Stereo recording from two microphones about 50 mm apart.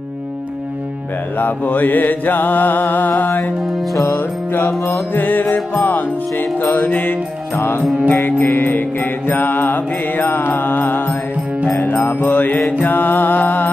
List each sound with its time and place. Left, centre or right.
1.4 s mantra: left
3.6 s music: centre
4.2 s music: left
5.1 s mantra: left
11.8 s music: left
12.6 s mantra: left